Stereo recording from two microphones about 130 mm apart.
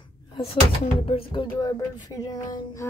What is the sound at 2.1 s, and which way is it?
Speech, 30° left (ahead or behind).